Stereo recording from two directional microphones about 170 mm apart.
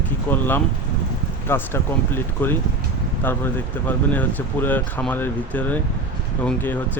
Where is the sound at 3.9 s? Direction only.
10° left (ahead or behind).